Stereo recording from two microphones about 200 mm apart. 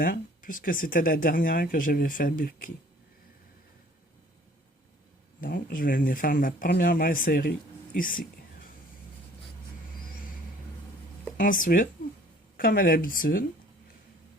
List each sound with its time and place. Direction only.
0.0 s speech: 45° left (ahead or behind)
5.4 s speech: 45° left (ahead or behind)
11.3 s speech: 40° left (ahead or behind)